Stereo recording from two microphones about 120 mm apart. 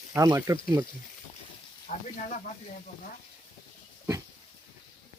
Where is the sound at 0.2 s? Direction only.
30° right (ahead or behind).